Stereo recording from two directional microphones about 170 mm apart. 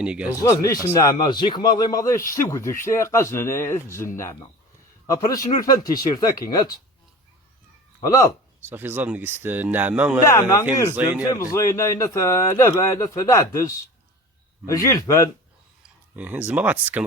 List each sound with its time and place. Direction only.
0.0 s speech: 5° right (ahead or behind)
0.4 s a man's voice: 20° left (ahead or behind)
8.7 s speech: 10° right (ahead or behind)
10.2 s a man's voice: 20° left (ahead or behind)
10.9 s speech: 10° right (ahead or behind)
11.3 s a man's voice: 15° left (ahead or behind)
16.1 s speech: 10° right (ahead or behind)